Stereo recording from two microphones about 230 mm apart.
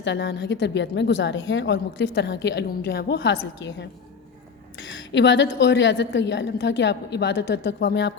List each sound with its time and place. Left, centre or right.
0.0 s a woman's voice: left